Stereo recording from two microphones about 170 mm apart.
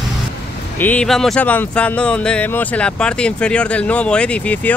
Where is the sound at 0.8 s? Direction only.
10° left (ahead or behind).